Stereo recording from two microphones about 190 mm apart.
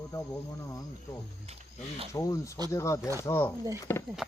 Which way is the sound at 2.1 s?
15° left (ahead or behind).